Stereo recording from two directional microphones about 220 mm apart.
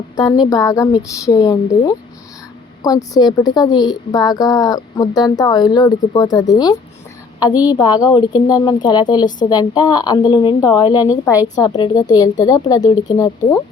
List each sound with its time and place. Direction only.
0.2 s a woman's voice: 20° left (ahead or behind)